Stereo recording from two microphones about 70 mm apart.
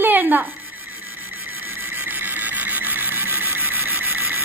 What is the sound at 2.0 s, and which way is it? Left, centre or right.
Vehicle, right.